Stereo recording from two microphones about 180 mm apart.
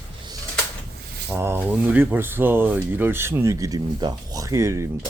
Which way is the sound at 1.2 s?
15° right (ahead or behind).